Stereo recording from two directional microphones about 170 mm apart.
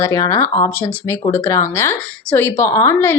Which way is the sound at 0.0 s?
15° left (ahead or behind).